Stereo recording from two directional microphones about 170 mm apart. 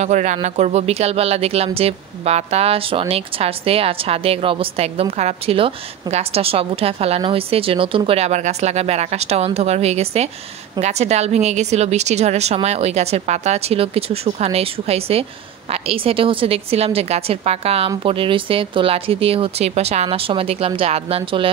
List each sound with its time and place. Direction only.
0.0 s speech: 45° right (ahead or behind)